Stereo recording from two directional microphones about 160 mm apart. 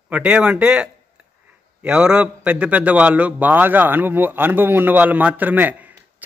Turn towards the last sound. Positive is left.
turn(degrees=-10)  # may be behind; listen again after turning